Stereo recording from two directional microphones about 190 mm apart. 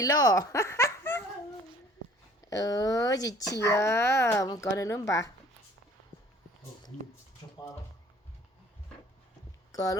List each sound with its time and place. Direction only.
0.0 s speech: 20° left (ahead or behind)
2.5 s speech: 20° left (ahead or behind)
6.9 s speech: 35° left (ahead or behind)
9.7 s speech: 20° left (ahead or behind)